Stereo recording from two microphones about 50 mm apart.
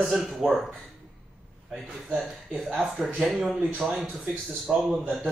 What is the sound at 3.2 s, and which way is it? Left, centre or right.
A man's voice, centre.